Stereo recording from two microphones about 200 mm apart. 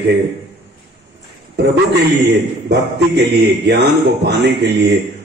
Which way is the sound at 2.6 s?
55° right (ahead or behind).